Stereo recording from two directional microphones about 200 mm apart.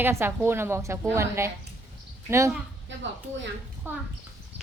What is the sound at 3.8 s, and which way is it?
Speech, 10° right (ahead or behind).